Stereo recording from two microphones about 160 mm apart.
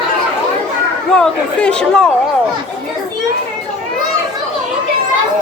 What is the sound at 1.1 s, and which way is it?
Speech, 5° left (ahead or behind).